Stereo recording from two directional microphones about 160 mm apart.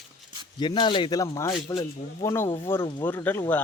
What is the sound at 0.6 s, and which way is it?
Speech, 30° left (ahead or behind).